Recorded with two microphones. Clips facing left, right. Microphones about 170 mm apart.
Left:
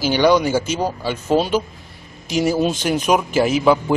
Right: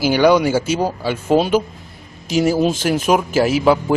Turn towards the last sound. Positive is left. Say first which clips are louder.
# right 1 dB
turn(degrees=-5)  # may be behind; listen again after turning